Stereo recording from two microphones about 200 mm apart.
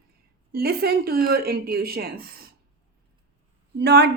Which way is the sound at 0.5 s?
50° right (ahead or behind).